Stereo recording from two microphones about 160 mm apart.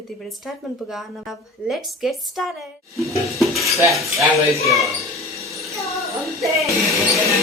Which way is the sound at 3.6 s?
20° right (ahead or behind).